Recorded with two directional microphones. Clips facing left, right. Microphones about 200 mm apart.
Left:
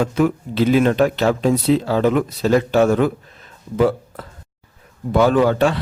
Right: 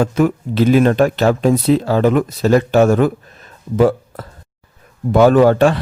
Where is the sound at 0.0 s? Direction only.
45° right (ahead or behind).